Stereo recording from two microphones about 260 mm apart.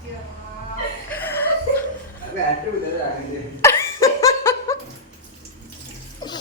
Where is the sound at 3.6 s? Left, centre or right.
Centre.